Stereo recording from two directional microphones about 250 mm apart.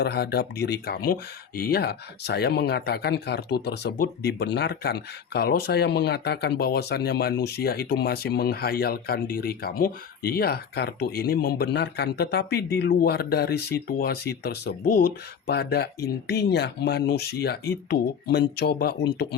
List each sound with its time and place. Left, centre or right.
0.0 s speech: left